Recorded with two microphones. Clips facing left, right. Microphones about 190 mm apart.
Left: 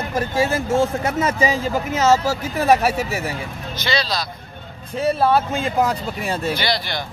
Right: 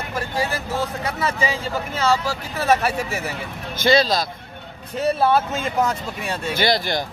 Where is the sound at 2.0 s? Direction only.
45° left (ahead or behind).